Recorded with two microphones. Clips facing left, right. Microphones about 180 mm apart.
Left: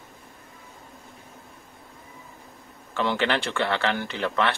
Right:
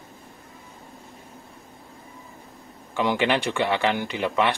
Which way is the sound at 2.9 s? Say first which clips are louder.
Right 2 dB; 15° right (ahead or behind).